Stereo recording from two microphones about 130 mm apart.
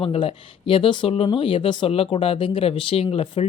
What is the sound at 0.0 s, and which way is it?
Speech, 45° left (ahead or behind).